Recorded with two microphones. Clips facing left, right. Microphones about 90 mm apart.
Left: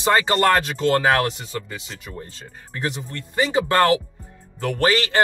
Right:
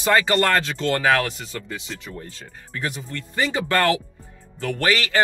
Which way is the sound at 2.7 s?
20° left (ahead or behind).